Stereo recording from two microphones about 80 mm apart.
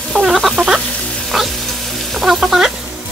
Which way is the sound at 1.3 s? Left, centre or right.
Centre.